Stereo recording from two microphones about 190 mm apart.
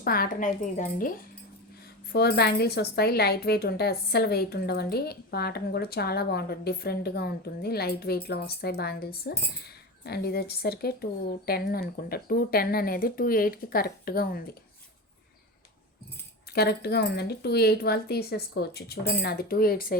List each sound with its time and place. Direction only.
0.0 s a woman's voice: 50° left (ahead or behind)
2.1 s speech: 55° left (ahead or behind)
16.6 s speech: 55° left (ahead or behind)